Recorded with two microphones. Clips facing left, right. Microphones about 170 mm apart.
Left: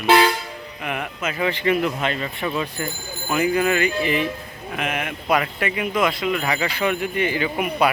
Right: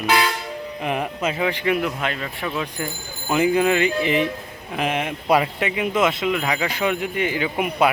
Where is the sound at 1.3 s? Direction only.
10° right (ahead or behind).